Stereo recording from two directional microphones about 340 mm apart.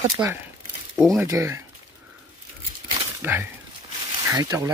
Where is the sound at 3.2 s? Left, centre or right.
Centre.